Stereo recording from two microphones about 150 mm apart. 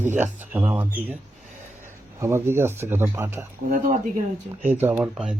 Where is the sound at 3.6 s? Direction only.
65° right (ahead or behind).